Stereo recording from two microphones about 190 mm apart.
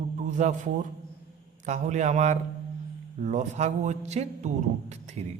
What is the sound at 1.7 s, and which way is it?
A man's voice, 40° right (ahead or behind).